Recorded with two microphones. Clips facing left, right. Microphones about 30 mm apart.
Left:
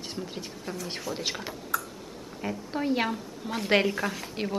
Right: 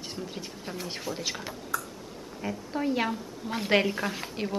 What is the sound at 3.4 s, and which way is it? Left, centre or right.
Speech, centre.